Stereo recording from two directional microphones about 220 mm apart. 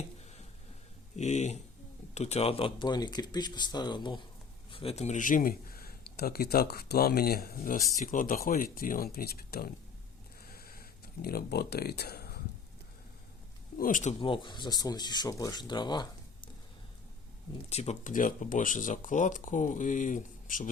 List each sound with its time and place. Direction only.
1.1 s speech: 30° left (ahead or behind)
10.4 s a sound: 45° left (ahead or behind)
13.7 s speech: 40° left (ahead or behind); by 16.0 s 20° left (ahead or behind)
17.7 s speech: 30° left (ahead or behind)